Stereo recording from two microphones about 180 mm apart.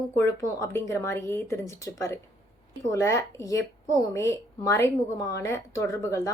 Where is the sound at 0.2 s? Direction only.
15° left (ahead or behind).